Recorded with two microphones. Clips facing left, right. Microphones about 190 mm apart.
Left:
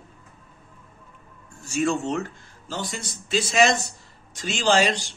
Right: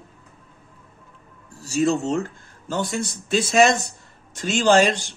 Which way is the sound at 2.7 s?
55° right (ahead or behind).